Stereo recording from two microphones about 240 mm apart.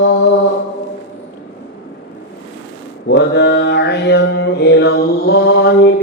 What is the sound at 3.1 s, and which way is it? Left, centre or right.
Mantra, left.